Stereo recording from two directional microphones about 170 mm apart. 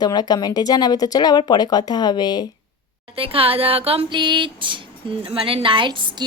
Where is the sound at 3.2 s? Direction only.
35° right (ahead or behind).